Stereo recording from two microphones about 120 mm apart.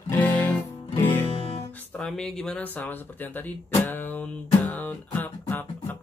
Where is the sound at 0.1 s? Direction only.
15° left (ahead or behind).